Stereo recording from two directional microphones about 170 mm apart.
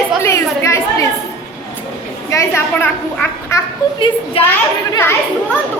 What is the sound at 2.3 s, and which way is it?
A woman's voice, 15° left (ahead or behind).